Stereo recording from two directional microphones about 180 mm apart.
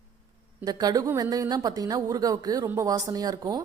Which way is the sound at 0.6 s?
20° right (ahead or behind).